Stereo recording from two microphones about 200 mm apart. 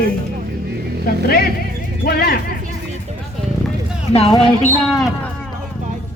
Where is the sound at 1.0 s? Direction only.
50° left (ahead or behind).